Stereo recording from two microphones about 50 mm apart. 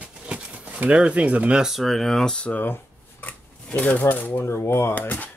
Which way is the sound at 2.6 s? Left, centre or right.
Left.